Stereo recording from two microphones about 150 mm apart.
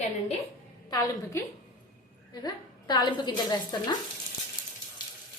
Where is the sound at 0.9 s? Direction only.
25° left (ahead or behind).